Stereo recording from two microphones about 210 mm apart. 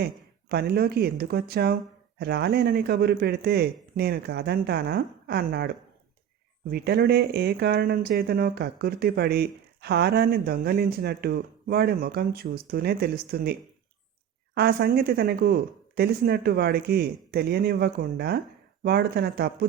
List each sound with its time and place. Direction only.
0.0 s speech: 50° right (ahead or behind)
14.6 s speech: 50° right (ahead or behind)